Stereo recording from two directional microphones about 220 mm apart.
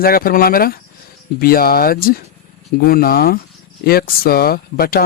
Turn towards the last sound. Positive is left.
turn(degrees=45)  # may be behind; listen again after turning